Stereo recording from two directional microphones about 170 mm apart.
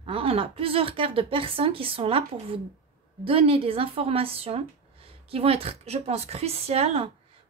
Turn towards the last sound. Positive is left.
turn(degrees=-35)  # may be behind; listen again after turning